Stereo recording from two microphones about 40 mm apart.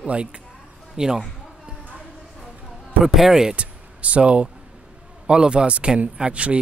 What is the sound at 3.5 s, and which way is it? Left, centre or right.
A man's voice, right.